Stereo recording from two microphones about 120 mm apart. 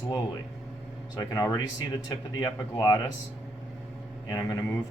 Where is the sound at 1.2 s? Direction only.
35° left (ahead or behind).